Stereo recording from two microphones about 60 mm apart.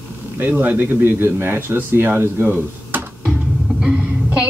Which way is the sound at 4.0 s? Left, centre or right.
Right.